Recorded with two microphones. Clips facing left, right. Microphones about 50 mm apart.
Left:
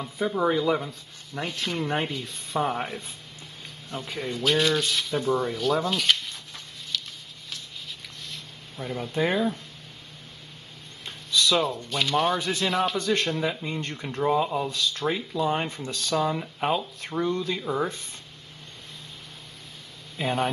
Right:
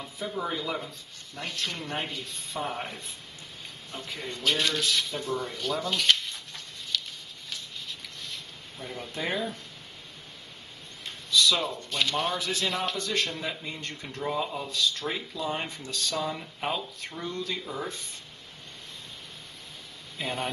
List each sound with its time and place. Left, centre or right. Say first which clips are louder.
0.2 s speech: left 8 dB; centre
5.1 s speech: left 7 dB; centre
5.4 s speech: left 7 dB; centre
5.8 s a sound: left 1 dB; centre
8.8 s speech: left 7 dB; centre
11.1 s a sound: left 1 dB; centre
11.6 s speech: left 3 dB; centre
12.9 s speech: left 5 dB; centre
15.9 s speech: left 5 dB; left
16.3 s speech: left 6 dB; centre
17.6 s speech: left 7 dB; left
20.2 s speech: left 6 dB; centre